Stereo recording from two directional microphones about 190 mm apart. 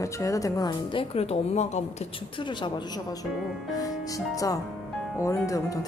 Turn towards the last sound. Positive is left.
turn(degrees=15)  # may be behind; listen again after turning